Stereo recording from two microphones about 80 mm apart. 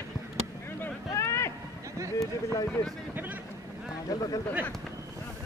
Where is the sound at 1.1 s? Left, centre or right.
Left.